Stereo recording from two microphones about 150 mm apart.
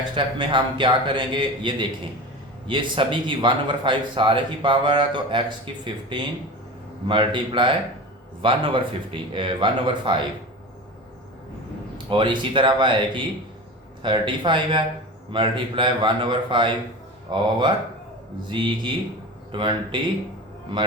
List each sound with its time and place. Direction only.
0.1 s speech: 30° right (ahead or behind)
12.1 s speech: 30° right (ahead or behind)